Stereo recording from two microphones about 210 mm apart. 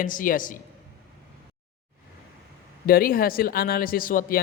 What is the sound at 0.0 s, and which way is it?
Speech, 40° left (ahead or behind).